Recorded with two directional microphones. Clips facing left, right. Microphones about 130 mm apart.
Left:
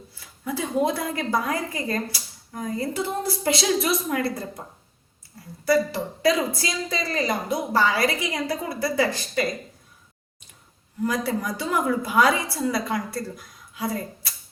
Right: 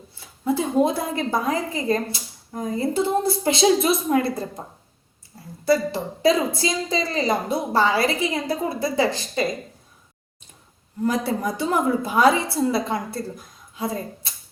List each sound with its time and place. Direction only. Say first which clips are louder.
0.4 s a woman's voice: right 4 dB; 25° right (ahead or behind)
5.6 s a woman's voice: right 1 dB; 25° right (ahead or behind)
11.0 s a woman's voice: right 2 dB; 25° right (ahead or behind)